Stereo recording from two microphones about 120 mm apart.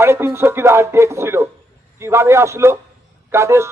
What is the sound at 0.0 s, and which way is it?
A man's voice, 20° right (ahead or behind).